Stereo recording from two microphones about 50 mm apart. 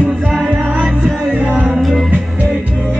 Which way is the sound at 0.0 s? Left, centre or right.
Centre.